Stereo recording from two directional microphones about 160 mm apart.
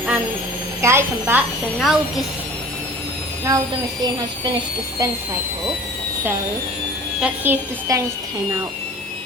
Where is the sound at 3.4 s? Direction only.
25° right (ahead or behind).